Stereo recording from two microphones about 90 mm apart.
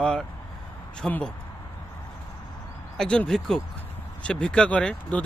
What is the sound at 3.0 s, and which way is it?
Speech, 10° left (ahead or behind).